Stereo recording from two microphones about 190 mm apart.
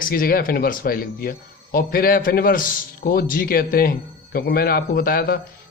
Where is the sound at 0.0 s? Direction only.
50° left (ahead or behind).